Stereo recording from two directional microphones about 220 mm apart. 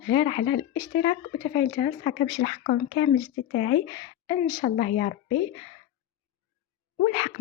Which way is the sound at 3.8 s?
20° left (ahead or behind).